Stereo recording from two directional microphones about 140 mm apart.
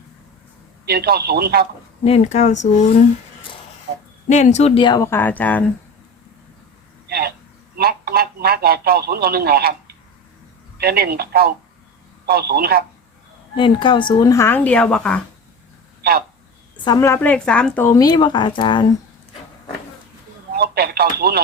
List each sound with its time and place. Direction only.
0.9 s a man's voice: 90° right
2.0 s speech: 50° left (ahead or behind)
4.3 s speech: 55° left (ahead or behind); by 4.9 s 40° left (ahead or behind)
4.9 s speech: 15° left (ahead or behind)
7.8 s a man's voice: 90° right
10.8 s a man's voice: 90° right
13.6 s speech: 35° left (ahead or behind); by 15.2 s 5° left (ahead or behind)
16.8 s speech: 30° left (ahead or behind)
17.1 s speech: 10° left (ahead or behind)
18.0 s speech: 30° left (ahead or behind)
20.6 s a man's voice: 90° right